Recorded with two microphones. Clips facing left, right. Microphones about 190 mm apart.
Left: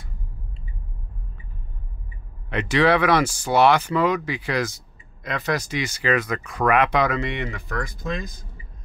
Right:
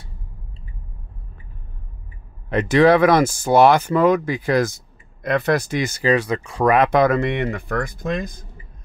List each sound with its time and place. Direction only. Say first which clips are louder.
2.5 s speech: right 5 dB; 45° right (ahead or behind)
6.0 s speech: right 4 dB; 30° right (ahead or behind)
6.9 s speech: right 6 dB; 50° right (ahead or behind)